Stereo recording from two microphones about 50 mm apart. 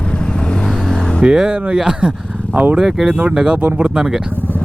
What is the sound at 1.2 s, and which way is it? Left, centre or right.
Speech, centre.